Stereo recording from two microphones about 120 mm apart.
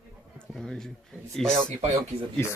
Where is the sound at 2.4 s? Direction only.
20° left (ahead or behind).